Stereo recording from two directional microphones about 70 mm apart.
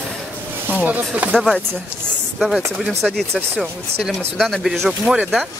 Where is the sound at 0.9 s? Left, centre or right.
Right.